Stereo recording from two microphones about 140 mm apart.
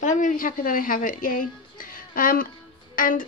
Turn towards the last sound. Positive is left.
turn(degrees=80)